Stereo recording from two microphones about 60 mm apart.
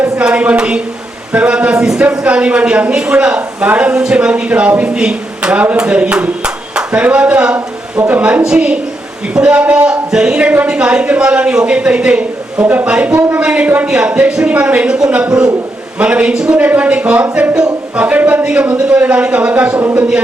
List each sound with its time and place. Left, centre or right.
0.0 s a woman's voice: centre
1.3 s a sound: centre
2.0 s a man's voice: right
16.6 s speech: right